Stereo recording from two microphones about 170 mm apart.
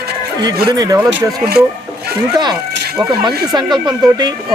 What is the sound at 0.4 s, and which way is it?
Speech, 25° right (ahead or behind).